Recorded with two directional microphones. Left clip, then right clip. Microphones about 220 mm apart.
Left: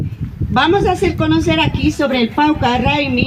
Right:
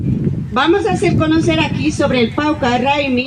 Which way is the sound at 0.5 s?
50° left (ahead or behind).